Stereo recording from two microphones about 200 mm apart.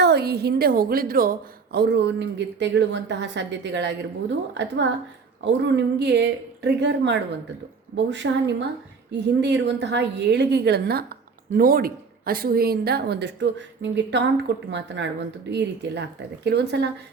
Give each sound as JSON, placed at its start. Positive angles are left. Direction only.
{"t": 0.0, "sound": "a woman's voice", "side_deg": -55}